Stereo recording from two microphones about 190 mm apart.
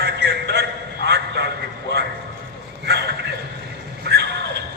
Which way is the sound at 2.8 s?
60° right (ahead or behind).